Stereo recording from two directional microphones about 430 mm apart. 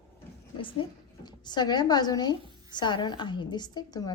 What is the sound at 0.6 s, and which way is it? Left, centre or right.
A woman's voice, centre.